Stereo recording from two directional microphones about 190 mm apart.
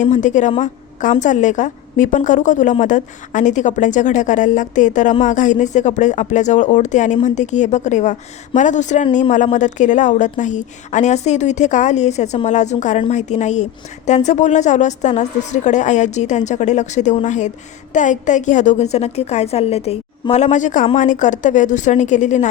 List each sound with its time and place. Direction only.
0.0 s a woman's voice: 40° left (ahead or behind)